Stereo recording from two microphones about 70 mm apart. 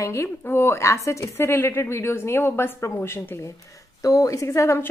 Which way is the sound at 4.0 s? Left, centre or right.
Left.